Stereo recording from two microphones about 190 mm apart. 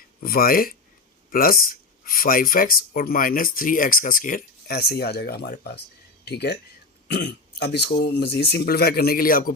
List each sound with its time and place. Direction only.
0.2 s speech: 50° left (ahead or behind)